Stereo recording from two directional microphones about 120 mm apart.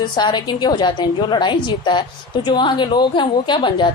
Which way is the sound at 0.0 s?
40° left (ahead or behind).